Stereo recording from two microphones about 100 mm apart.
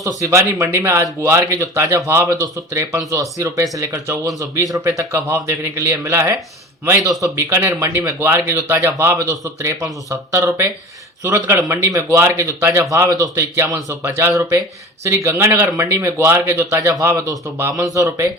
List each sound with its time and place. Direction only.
0.0 s speech: 30° right (ahead or behind)